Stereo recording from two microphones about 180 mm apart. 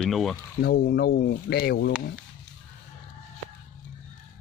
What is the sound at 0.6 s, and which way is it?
Speech, 60° left (ahead or behind).